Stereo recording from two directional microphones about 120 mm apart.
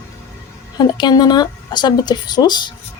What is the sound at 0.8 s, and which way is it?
Speech, 35° left (ahead or behind).